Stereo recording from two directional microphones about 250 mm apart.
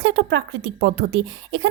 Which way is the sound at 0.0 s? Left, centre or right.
Right.